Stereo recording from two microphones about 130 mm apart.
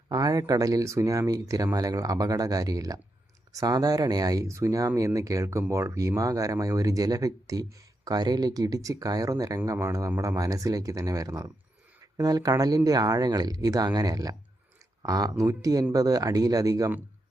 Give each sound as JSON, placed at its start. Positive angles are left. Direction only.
{"t": 0.1, "sound": "speech", "side_deg": -30}